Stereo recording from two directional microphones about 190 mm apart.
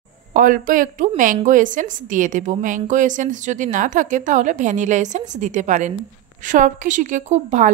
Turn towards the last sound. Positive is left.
turn(degrees=-40)  # may be behind; listen again after turning